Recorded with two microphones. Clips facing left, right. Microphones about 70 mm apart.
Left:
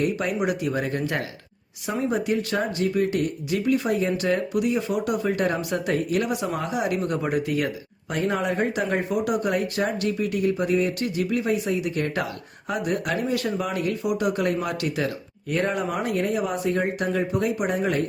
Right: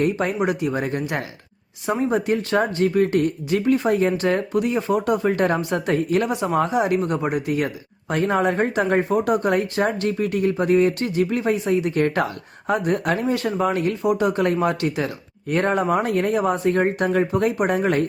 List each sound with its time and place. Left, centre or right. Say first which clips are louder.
0.0 s speech: right 3 dB; right
1.9 s speech: right 4 dB; right
8.1 s speech: right 5 dB; right
15.4 s speech: right 5 dB; right